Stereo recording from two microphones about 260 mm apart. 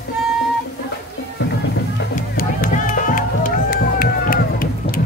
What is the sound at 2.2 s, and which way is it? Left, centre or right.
Music, left.